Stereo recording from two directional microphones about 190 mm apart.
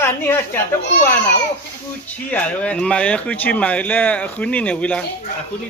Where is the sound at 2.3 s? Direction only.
5° left (ahead or behind).